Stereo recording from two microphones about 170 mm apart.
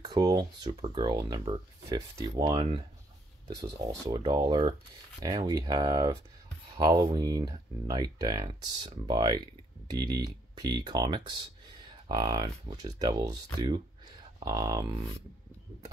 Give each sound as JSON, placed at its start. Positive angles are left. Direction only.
{"t": 0.0, "sound": "speech", "side_deg": -20}
{"t": 4.2, "sound": "speech", "side_deg": -25}